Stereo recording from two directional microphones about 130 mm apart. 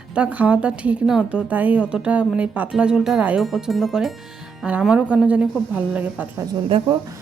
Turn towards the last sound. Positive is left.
turn(degrees=-45)  # may be behind; listen again after turning